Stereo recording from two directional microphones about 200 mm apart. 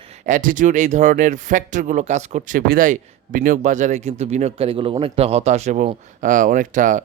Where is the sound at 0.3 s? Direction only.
40° right (ahead or behind).